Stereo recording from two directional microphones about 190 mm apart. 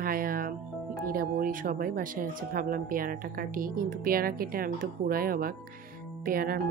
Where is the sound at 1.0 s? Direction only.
50° right (ahead or behind).